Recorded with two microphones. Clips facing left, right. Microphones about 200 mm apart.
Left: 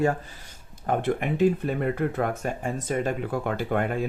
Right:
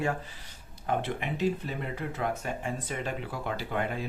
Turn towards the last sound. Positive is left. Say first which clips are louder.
# left 6 dB
turn(degrees=50)  # may be behind; listen again after turning